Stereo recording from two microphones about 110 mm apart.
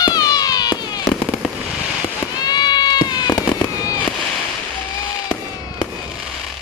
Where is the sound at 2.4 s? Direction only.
40° left (ahead or behind).